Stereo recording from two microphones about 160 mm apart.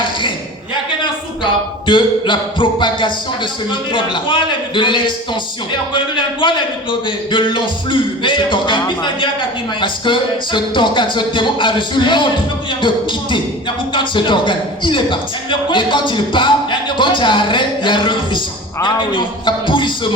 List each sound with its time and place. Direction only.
1.9 s a man's voice: 30° left (ahead or behind)